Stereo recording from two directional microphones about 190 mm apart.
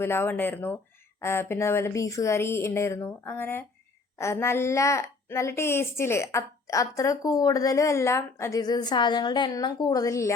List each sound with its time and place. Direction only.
0.0 s a woman's voice: 10° left (ahead or behind)